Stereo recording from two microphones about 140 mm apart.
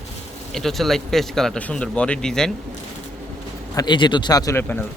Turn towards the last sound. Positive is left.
turn(degrees=15)  # may be behind; listen again after turning